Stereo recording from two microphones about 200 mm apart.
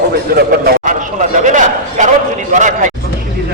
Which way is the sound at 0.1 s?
50° right (ahead or behind).